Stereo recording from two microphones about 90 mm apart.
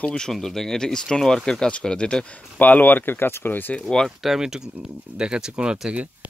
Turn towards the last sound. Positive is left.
turn(degrees=-10)  # may be behind; listen again after turning